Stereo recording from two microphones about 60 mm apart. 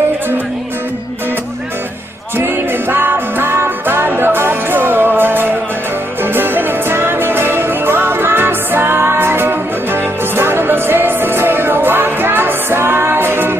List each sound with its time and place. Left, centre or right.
2.3 s music: right